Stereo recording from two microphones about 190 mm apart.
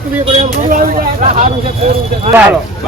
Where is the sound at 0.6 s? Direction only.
45° right (ahead or behind).